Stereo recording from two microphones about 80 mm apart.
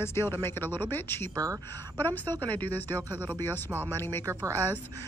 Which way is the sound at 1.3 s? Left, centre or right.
Right.